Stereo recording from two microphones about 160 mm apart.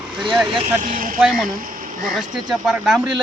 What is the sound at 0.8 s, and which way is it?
Speech, 60° right (ahead or behind).